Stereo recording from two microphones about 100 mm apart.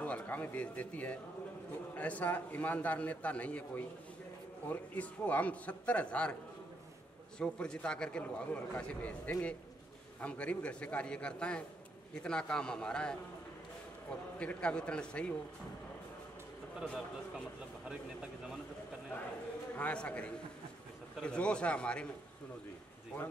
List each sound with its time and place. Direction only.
0.0 s a man's voice: 15° left (ahead or behind)
7.3 s a man's voice: 10° left (ahead or behind)
14.4 s a man's voice: 10° left (ahead or behind)
17.8 s speech: 5° right (ahead or behind)
19.7 s a man's voice: 15° left (ahead or behind)